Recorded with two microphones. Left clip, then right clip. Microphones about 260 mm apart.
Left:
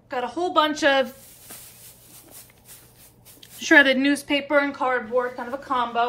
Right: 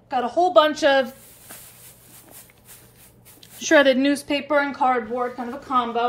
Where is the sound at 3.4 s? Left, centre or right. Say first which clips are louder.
Left 1 dB; centre.